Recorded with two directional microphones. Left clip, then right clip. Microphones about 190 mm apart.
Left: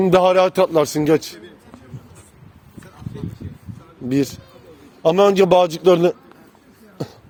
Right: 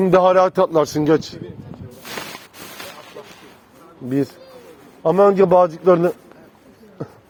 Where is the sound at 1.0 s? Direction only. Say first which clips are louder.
Even; 20° left (ahead or behind).